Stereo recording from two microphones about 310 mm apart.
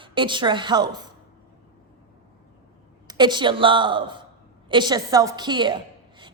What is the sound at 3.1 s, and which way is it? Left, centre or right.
A woman's voice, centre.